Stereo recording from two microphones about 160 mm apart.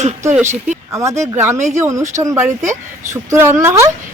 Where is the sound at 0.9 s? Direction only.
20° right (ahead or behind).